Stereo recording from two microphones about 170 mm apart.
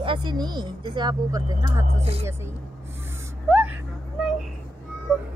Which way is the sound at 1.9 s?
35° right (ahead or behind).